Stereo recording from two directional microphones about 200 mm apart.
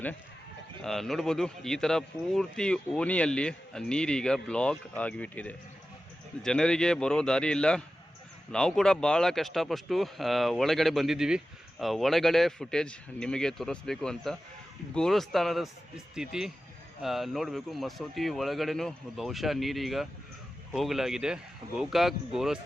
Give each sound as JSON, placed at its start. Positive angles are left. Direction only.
{"t": 0.8, "sound": "speech", "side_deg": 0}